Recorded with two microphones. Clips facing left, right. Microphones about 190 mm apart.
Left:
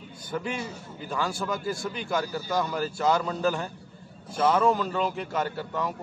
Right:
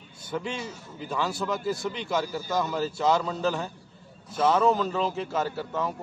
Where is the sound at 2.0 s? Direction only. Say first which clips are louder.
Left 1 dB; centre (ahead or behind).